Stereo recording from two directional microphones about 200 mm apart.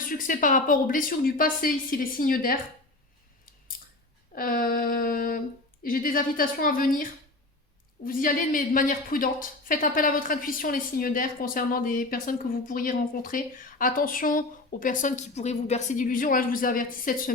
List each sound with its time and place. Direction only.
0.1 s a woman's voice: 45° left (ahead or behind)
4.4 s a woman's voice: 45° left (ahead or behind)